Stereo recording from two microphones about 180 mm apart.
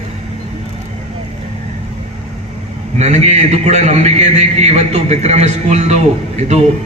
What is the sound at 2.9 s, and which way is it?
A man's voice, 40° right (ahead or behind).